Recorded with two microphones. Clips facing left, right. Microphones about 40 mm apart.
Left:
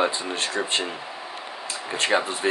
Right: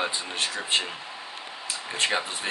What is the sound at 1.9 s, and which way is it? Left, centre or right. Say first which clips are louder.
Speech: left 4 dB; centre.